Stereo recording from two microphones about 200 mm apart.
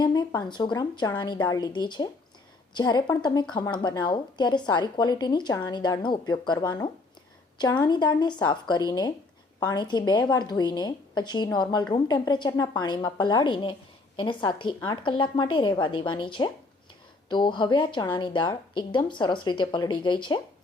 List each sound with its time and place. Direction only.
0.0 s a woman's voice: 20° left (ahead or behind)